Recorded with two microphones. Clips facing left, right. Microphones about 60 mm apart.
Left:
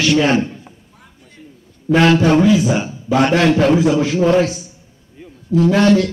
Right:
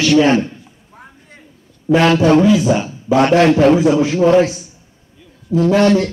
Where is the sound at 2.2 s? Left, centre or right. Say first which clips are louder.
Right 2 dB; right.